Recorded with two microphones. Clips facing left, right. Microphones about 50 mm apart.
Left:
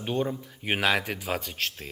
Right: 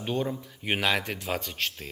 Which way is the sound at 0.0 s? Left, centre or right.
Centre.